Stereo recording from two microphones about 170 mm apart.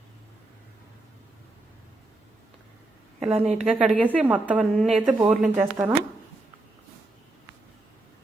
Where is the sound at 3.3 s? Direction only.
40° right (ahead or behind).